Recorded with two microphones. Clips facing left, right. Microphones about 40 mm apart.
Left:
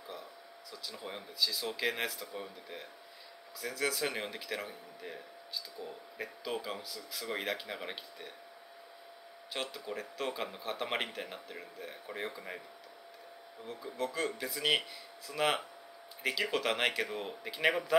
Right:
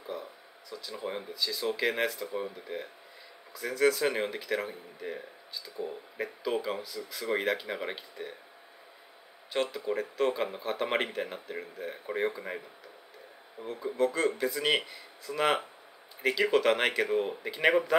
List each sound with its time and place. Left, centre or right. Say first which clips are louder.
0.1 s speech: right 8 dB; centre
9.5 s speech: right 9 dB; centre
13.6 s speech: right 6 dB; right
13.9 s speech: right 8 dB; centre